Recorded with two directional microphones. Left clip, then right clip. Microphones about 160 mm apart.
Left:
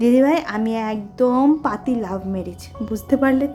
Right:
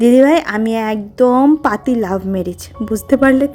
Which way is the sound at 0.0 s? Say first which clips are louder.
Right 6 dB; 35° right (ahead or behind).